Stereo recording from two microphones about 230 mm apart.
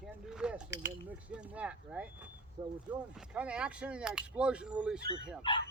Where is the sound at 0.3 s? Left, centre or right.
Centre.